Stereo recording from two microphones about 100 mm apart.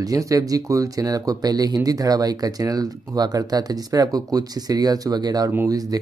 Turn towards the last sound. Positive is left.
turn(degrees=-40)  # may be behind; listen again after turning